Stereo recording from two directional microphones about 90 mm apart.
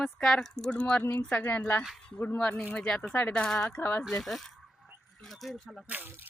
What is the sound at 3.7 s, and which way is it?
Speech, 25° left (ahead or behind).